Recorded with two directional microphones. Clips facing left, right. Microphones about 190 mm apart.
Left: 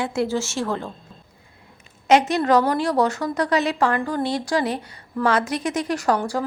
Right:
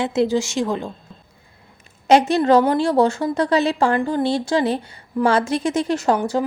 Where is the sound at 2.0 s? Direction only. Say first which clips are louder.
Right 3 dB; 30° right (ahead or behind).